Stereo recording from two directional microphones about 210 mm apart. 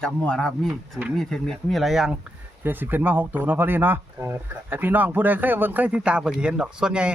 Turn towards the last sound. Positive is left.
turn(degrees=-5)  # may be behind; listen again after turning